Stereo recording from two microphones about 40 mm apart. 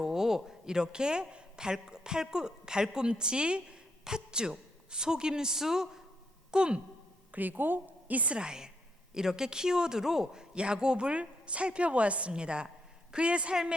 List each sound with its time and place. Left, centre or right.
0.0 s a woman's voice: centre
6.5 s a woman's voice: right
7.3 s a woman's voice: right
8.4 s a woman's voice: centre
10.5 s a woman's voice: right